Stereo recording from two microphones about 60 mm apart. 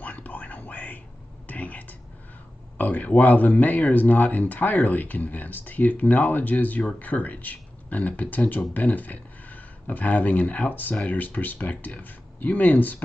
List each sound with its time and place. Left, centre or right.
0.0 s whispering: left
2.8 s speech: left